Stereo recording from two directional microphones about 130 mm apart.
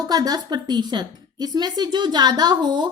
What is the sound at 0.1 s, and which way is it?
A woman's voice, 30° right (ahead or behind).